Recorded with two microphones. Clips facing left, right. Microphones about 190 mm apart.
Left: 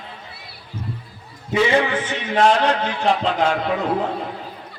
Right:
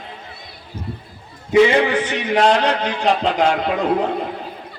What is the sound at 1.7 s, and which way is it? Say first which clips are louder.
A man's voice: right 2 dB; 15° right (ahead or behind).